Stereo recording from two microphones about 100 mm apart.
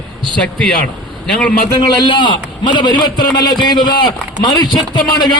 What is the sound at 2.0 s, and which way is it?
A man's voice, 50° left (ahead or behind).